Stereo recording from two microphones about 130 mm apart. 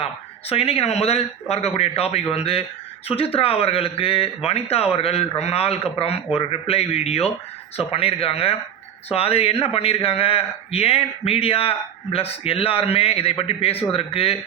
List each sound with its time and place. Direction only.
0.0 s a man's voice: 50° left (ahead or behind)